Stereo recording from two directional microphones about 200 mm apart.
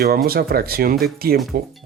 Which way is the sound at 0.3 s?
50° right (ahead or behind).